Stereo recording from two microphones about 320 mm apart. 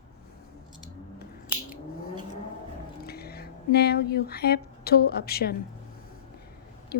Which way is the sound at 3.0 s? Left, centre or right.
Left.